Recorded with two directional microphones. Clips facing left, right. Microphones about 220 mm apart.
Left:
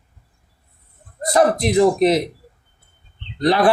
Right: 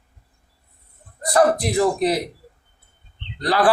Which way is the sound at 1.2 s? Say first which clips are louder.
Left 1 dB; 25° left (ahead or behind).